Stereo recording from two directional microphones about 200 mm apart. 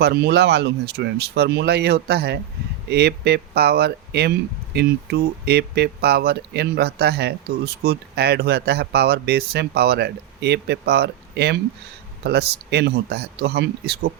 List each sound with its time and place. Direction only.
0.0 s speech: 55° right (ahead or behind)